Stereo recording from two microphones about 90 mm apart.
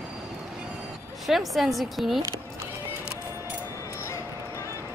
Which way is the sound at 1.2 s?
Centre (ahead or behind).